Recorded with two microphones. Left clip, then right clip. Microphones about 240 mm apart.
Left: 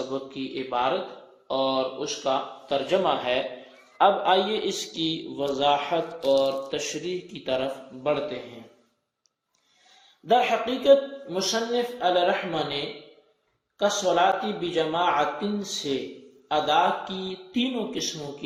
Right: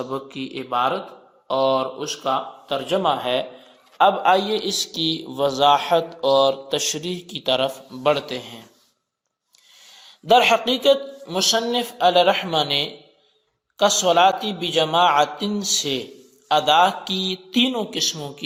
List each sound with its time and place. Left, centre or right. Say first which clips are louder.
0.1 s a man's voice: right 3 dB; right
10.2 s speech: right 6 dB; right